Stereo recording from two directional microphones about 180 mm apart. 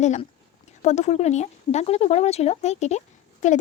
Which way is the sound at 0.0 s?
40° left (ahead or behind).